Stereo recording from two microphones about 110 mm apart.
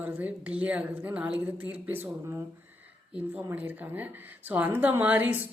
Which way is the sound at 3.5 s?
15° right (ahead or behind).